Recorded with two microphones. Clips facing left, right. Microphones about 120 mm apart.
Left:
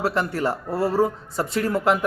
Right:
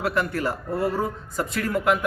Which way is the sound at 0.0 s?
30° left (ahead or behind).